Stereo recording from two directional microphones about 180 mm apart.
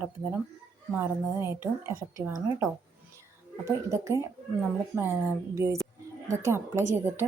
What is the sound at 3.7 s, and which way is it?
A woman's voice, 15° right (ahead or behind).